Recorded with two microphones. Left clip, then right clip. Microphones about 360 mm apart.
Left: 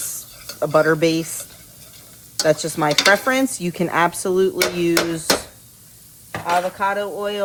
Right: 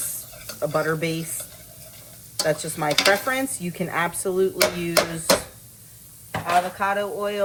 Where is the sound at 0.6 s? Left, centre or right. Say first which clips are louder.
Left 8 dB; left.